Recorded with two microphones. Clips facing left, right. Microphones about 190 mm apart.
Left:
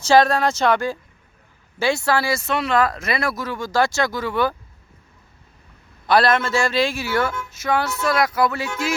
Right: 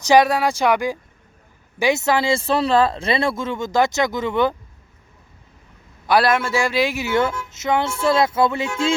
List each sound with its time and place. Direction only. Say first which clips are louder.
0.0 s speech: right 1 dB; 15° right (ahead or behind)
6.1 s speech: even; 10° right (ahead or behind); by 9.0 s 25° right (ahead or behind)